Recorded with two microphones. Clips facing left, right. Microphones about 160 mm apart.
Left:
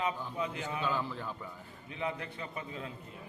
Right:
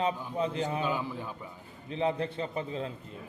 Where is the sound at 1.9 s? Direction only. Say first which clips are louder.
Right 8 dB; 30° right (ahead or behind).